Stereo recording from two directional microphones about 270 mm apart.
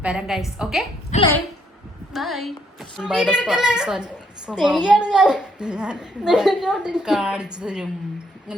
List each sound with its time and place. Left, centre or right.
0.0 s a woman's voice: centre
1.1 s a woman's voice: left
2.1 s a woman's voice: centre